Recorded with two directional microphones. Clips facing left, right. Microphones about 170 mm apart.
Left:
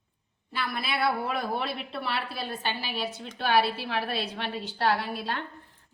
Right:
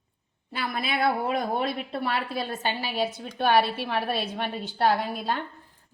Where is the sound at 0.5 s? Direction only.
45° right (ahead or behind).